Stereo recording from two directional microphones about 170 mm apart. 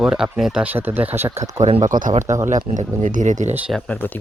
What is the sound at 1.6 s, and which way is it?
Speech, 40° right (ahead or behind).